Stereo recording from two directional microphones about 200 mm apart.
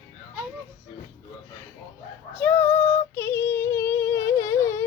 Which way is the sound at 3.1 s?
10° left (ahead or behind).